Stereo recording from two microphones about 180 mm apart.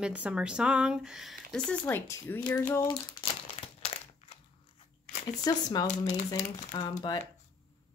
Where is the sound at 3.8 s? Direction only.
35° left (ahead or behind).